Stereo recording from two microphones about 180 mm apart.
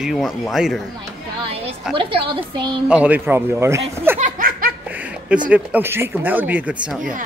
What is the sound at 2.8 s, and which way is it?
Speech, 5° right (ahead or behind).